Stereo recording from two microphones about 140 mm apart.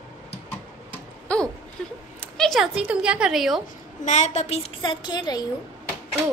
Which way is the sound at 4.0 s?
60° left (ahead or behind).